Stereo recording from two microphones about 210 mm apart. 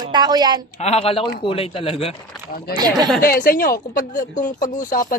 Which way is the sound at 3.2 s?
40° left (ahead or behind).